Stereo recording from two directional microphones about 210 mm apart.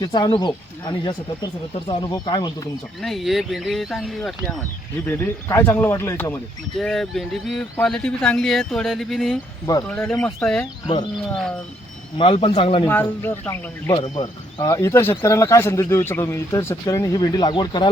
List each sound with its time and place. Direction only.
0.0 s speech: 20° left (ahead or behind)
3.0 s speech: centre (ahead or behind)
10.8 s speech: 20° left (ahead or behind)
12.1 s speech: 25° left (ahead or behind)
12.9 s speech: 10° left (ahead or behind)